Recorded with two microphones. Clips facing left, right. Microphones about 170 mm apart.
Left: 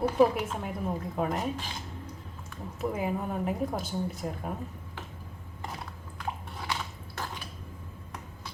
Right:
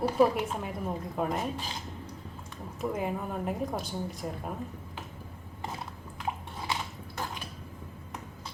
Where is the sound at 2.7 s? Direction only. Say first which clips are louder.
Left 1 dB; centre (ahead or behind).